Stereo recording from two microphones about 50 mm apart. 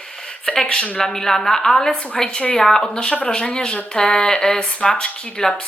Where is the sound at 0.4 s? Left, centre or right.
Centre.